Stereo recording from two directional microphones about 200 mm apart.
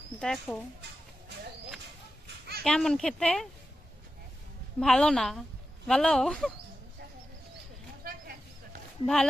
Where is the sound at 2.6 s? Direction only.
5° left (ahead or behind).